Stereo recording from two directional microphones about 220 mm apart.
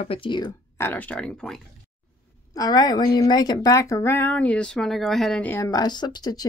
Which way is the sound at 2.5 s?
15° left (ahead or behind).